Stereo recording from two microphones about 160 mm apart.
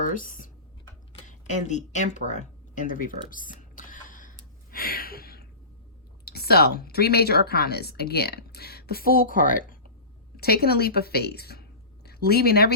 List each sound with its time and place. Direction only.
0.0 s speech: 55° left (ahead or behind)
1.3 s a sound: 50° left (ahead or behind); by 5.5 s 70° left (ahead or behind)
6.2 s a woman's voice: 80° left; by 9.7 s 60° left (ahead or behind)
10.3 s a woman's voice: 75° left (ahead or behind)